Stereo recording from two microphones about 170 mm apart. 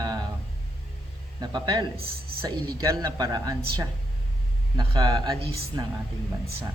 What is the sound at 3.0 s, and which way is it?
A man's voice, 20° right (ahead or behind).